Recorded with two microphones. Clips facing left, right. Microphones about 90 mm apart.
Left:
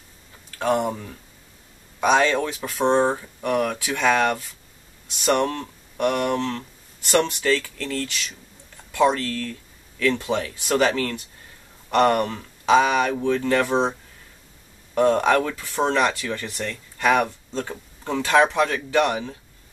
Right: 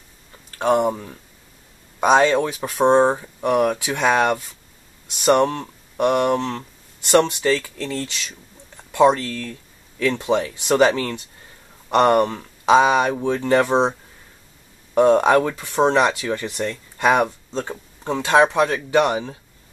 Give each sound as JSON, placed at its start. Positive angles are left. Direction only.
{"t": 0.6, "sound": "speech", "side_deg": -30}
{"t": 2.0, "sound": "speech", "side_deg": -35}
{"t": 2.8, "sound": "speech", "side_deg": -25}
{"t": 15.0, "sound": "speech", "side_deg": -25}